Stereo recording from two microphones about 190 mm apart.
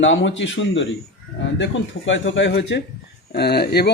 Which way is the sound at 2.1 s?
75° left (ahead or behind).